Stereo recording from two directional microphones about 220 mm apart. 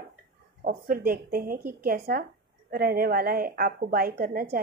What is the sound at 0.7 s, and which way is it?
A woman's voice, 40° right (ahead or behind).